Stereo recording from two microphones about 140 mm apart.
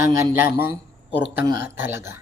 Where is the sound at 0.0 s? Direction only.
20° right (ahead or behind).